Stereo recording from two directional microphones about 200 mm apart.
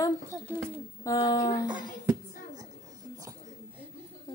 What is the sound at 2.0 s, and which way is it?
Child singing, 15° right (ahead or behind).